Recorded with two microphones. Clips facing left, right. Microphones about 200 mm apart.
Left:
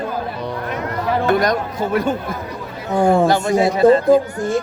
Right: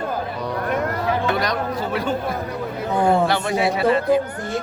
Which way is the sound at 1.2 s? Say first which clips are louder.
Left 5 dB; 50° left (ahead or behind).